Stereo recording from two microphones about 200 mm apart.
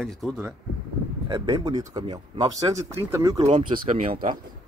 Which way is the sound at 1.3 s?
20° right (ahead or behind).